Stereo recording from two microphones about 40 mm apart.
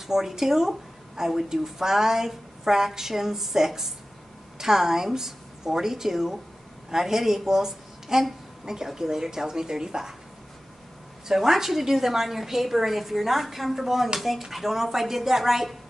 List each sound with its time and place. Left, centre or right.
0.0 s a woman's voice: centre
11.2 s a woman's voice: centre